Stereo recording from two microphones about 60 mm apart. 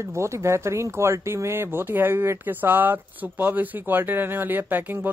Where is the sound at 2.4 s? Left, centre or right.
Right.